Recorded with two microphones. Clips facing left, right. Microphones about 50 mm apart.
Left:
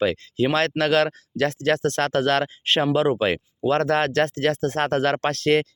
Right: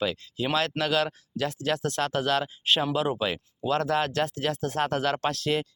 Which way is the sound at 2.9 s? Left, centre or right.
Left.